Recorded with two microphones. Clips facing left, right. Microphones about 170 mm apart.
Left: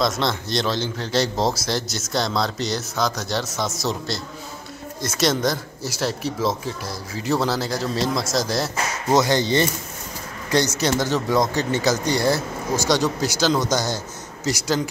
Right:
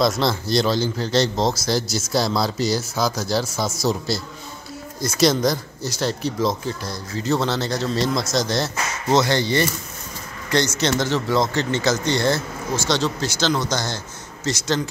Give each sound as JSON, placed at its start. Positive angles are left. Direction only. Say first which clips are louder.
{"t": 0.0, "sound": "speech", "louder": "right 2 dB", "side_deg": -5}
{"t": 9.2, "sound": "speech", "louder": "left 1 dB", "side_deg": 15}